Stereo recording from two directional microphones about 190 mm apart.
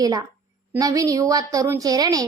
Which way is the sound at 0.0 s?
20° right (ahead or behind).